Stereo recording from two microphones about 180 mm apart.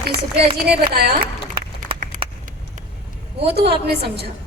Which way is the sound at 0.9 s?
60° right (ahead or behind).